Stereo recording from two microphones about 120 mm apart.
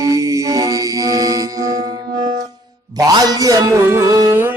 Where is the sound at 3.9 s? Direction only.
25° right (ahead or behind).